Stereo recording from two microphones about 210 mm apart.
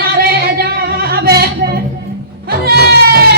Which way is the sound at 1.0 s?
50° right (ahead or behind).